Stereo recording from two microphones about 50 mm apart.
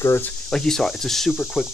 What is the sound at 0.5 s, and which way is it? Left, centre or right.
Speech, centre.